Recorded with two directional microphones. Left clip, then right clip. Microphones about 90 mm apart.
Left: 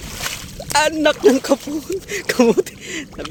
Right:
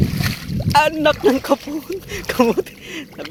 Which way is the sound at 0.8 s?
35° left (ahead or behind).